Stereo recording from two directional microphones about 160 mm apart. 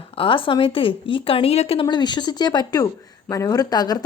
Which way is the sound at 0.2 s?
35° left (ahead or behind).